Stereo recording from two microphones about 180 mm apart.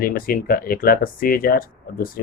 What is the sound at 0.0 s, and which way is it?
Speech, 55° left (ahead or behind).